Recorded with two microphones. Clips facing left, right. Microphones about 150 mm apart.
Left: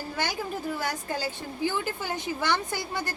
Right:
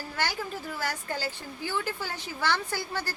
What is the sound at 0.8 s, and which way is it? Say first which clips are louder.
A woman's voice: left 2 dB; 20° left (ahead or behind).